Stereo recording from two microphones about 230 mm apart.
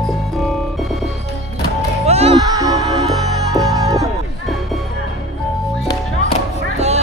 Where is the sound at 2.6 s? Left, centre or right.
Centre.